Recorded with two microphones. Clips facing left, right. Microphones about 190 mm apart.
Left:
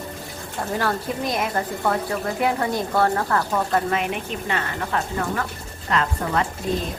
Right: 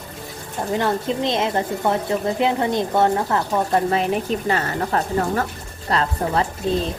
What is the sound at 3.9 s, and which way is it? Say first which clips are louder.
Speech: right 5 dB; 35° right (ahead or behind).